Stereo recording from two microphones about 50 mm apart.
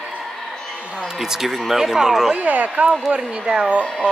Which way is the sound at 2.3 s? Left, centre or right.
Right.